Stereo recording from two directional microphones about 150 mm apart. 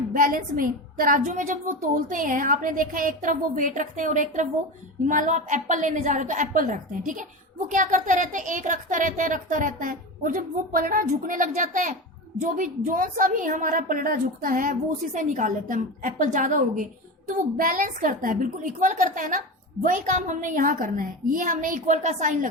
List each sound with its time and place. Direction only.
0.1 s a woman's voice: 70° right (ahead or behind)